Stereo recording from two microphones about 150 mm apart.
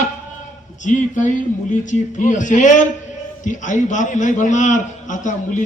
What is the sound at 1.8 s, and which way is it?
A man's voice, 55° left (ahead or behind).